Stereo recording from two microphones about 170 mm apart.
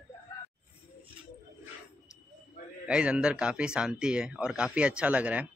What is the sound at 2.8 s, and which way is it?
Speech, 5° right (ahead or behind).